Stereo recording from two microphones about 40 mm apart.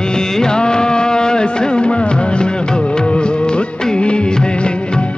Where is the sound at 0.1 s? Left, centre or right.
Centre.